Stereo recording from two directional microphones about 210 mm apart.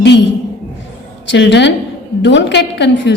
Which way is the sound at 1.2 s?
55° left (ahead or behind).